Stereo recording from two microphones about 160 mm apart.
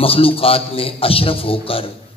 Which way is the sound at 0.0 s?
35° left (ahead or behind).